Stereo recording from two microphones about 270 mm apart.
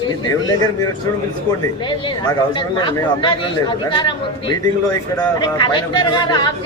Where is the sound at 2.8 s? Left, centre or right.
Centre.